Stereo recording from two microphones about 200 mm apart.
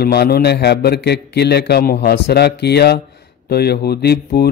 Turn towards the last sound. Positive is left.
turn(degrees=55)  # may be behind; listen again after turning